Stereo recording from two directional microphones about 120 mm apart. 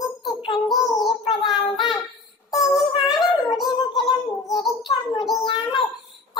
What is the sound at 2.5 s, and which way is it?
Synthetic singing, 30° left (ahead or behind).